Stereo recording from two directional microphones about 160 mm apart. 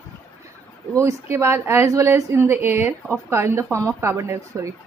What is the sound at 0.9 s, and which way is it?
A woman's voice, 20° right (ahead or behind).